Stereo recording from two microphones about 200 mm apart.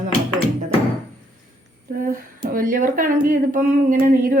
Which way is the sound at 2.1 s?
45° right (ahead or behind).